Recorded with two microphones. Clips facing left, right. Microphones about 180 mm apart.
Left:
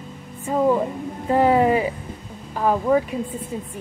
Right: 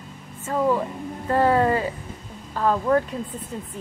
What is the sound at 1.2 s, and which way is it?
Speech, 15° left (ahead or behind).